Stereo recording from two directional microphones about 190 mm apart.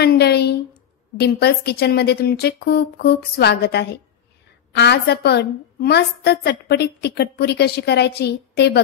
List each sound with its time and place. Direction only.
0.0 s a woman's voice: 60° left (ahead or behind)